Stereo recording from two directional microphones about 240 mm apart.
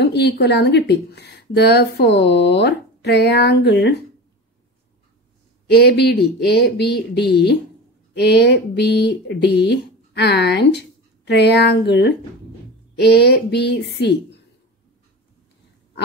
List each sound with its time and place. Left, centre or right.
0.0 s speech: left
5.7 s speech: left